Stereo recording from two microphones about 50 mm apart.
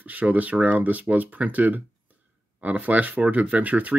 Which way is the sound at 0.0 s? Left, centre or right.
Right.